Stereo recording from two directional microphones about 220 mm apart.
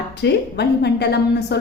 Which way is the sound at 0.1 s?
50° left (ahead or behind).